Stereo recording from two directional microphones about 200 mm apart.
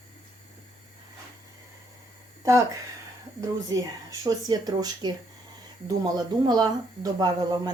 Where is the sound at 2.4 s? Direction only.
15° right (ahead or behind).